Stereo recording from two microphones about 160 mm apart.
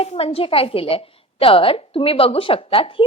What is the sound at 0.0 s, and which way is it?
A woman's voice, 40° left (ahead or behind).